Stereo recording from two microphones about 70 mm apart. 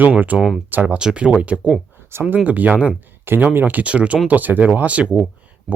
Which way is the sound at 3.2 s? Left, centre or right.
Right.